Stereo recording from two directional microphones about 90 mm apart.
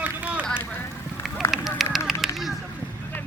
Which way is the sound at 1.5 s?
Centre (ahead or behind).